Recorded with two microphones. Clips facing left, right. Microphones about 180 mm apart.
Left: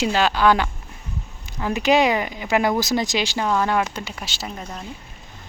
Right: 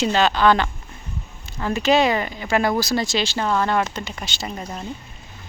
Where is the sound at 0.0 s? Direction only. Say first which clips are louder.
Right 1 dB; 10° left (ahead or behind).